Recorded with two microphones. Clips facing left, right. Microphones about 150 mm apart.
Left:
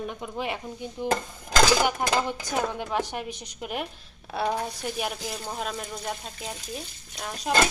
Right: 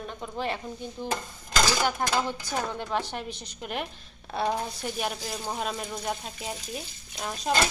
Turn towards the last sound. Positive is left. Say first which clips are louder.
# right 1 dB
turn(degrees=0)  # may be behind; listen again after turning